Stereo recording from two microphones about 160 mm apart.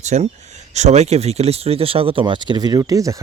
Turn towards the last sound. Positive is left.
turn(degrees=-20)  # may be behind; listen again after turning